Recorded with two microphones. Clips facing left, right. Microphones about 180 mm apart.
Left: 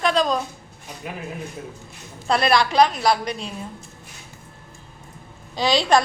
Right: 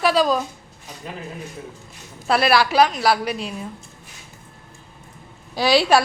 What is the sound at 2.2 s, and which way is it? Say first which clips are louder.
A woman's voice: right 1 dB; 5° right (ahead or behind).